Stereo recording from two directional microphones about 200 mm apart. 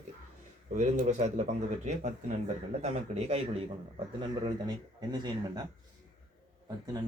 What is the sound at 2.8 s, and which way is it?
A man's voice, 30° right (ahead or behind).